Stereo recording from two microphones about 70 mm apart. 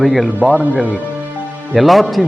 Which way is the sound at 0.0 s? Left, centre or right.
Centre.